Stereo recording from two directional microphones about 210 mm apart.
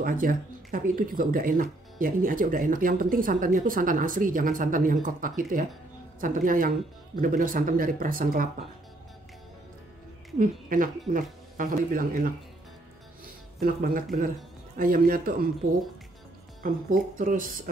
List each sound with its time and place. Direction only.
0.0 s speech: 40° right (ahead or behind)
10.4 s speech: 40° right (ahead or behind)
13.6 s a man's voice: 45° right (ahead or behind)
16.6 s speech: 40° right (ahead or behind)